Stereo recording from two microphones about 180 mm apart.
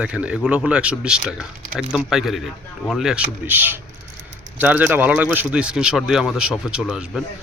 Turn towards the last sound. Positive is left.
turn(degrees=-5)  # may be behind; listen again after turning